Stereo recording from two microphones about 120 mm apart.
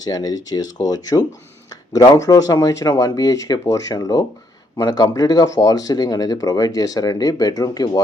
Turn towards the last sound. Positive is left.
turn(degrees=30)  # may be behind; listen again after turning